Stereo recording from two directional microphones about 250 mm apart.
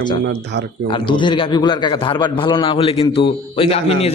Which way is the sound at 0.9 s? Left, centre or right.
Centre.